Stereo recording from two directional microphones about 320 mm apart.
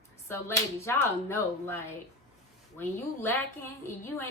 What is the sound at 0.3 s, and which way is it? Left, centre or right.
A woman's voice, centre.